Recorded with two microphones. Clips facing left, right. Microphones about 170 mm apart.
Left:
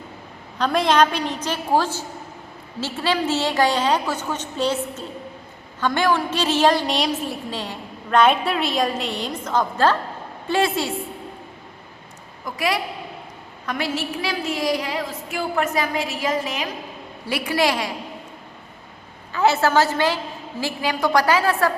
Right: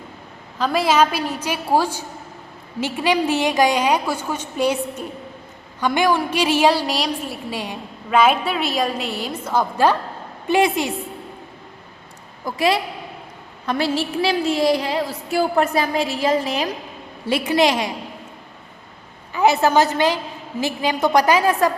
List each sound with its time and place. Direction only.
0.6 s a woman's voice: 5° right (ahead or behind)
7.5 s a woman's voice: 10° right (ahead or behind)
12.5 s a woman's voice: 25° right (ahead or behind)
19.3 s a woman's voice: 15° right (ahead or behind)